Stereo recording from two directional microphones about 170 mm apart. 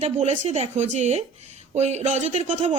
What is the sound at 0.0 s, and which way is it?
A woman's voice, 40° right (ahead or behind).